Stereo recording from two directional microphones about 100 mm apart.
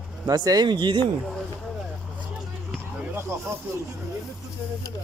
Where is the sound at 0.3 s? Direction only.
40° right (ahead or behind).